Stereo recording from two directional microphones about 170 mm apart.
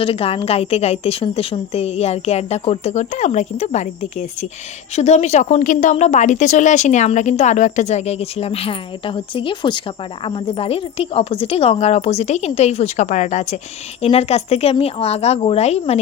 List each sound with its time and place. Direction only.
0.0 s speech: 35° left (ahead or behind)